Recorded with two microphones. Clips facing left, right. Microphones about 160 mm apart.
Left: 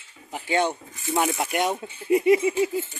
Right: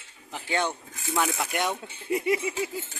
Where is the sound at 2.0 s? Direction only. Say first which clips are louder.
Left 8 dB; 25° left (ahead or behind).